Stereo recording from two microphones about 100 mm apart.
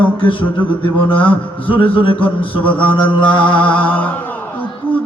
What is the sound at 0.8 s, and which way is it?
Music, 60° left (ahead or behind).